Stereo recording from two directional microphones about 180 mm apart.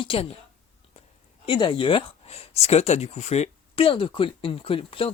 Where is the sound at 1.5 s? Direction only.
25° left (ahead or behind).